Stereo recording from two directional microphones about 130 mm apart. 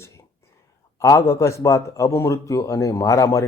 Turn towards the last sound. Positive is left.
turn(degrees=25)  # may be behind; listen again after turning